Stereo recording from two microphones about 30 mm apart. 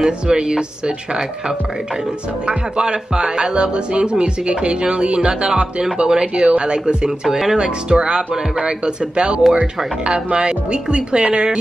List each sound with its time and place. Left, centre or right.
0.0 s speech: right
2.4 s music: right
5.9 s speech: right
6.6 s music: right
7.1 s speech: centre
7.5 s music: right